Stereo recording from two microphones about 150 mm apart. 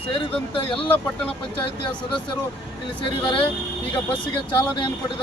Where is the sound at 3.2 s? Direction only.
35° left (ahead or behind).